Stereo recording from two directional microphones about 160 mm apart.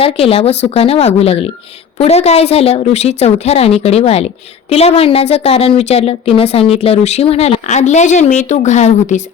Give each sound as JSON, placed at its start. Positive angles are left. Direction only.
{"t": 0.0, "sound": "a woman's voice", "side_deg": 35}